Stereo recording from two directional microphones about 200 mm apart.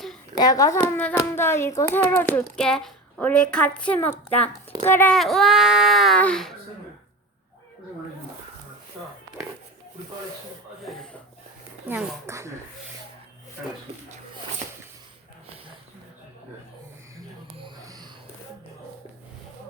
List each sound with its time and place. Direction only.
0.3 s a child's voice: 20° left (ahead or behind); by 6.6 s centre (ahead or behind)
10.8 s chuckle: 5° left (ahead or behind)
11.9 s speech: 10° right (ahead or behind)
17.2 s wheeze: 20° right (ahead or behind)